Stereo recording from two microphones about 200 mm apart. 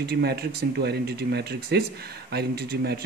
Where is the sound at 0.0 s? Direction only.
55° right (ahead or behind).